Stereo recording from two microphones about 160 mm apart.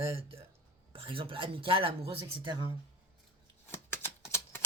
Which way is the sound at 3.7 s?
15° left (ahead or behind).